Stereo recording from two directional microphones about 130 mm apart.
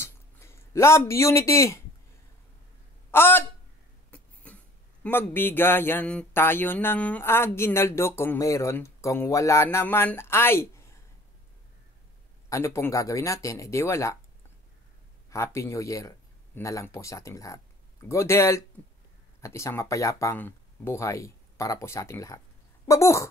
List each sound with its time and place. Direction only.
0.0 s a sound: 20° left (ahead or behind)
3.1 s a sound: 15° left (ahead or behind)
4.1 s cough: 10° left (ahead or behind)
5.0 s speech: 15° left (ahead or behind)
12.4 s speech: 20° left (ahead or behind)
15.2 s speech: 20° left (ahead or behind)